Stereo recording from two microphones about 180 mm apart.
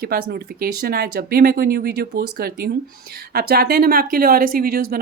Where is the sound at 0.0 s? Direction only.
60° right (ahead or behind).